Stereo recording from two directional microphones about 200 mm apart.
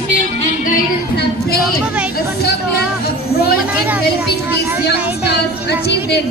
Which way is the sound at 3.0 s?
50° left (ahead or behind).